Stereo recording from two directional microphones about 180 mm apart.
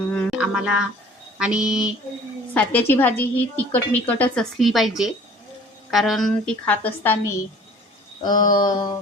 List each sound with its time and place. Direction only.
0.3 s a woman's voice: 5° right (ahead or behind)
2.5 s a woman's voice: 10° left (ahead or behind)
8.2 s mantra: 25° left (ahead or behind)